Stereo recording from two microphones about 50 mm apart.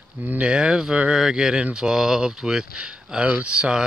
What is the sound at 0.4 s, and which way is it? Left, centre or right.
Speech, centre.